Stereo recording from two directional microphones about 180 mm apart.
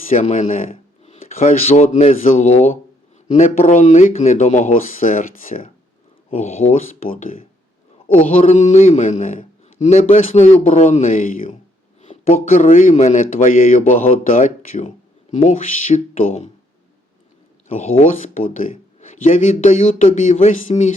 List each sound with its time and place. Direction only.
0.0 s speech: 45° left (ahead or behind)
6.3 s a man's voice: 40° left (ahead or behind)
17.7 s speech: 35° left (ahead or behind)